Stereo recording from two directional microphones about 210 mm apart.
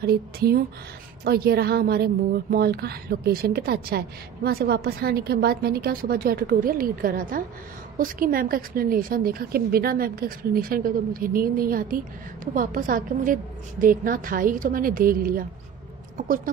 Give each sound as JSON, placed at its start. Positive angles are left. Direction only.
{"t": 0.0, "sound": "a woman's voice", "side_deg": -50}